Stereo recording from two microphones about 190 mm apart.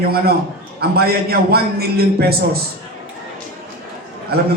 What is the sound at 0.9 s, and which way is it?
A man's voice, 55° right (ahead or behind).